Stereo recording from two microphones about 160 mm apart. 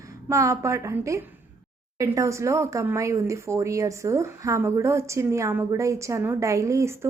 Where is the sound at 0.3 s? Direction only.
20° right (ahead or behind).